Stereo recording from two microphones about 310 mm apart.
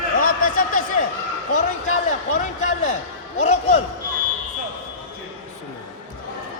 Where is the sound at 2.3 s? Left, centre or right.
Left.